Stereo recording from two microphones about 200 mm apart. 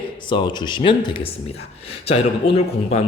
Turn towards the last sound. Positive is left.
turn(degrees=30)  # may be behind; listen again after turning